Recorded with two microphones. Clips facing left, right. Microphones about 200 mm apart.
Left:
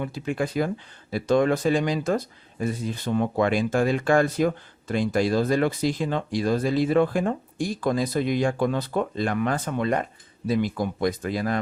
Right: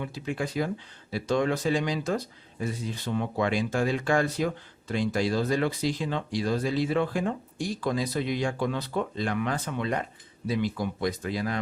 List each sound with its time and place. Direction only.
0.0 s speech: 55° left (ahead or behind)